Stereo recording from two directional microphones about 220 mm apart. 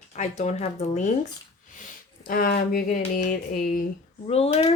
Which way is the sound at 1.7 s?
35° left (ahead or behind).